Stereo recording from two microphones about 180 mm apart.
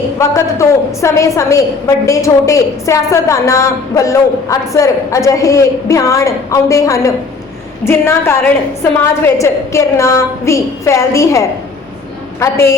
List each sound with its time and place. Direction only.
0.2 s a woman's voice: 15° left (ahead or behind)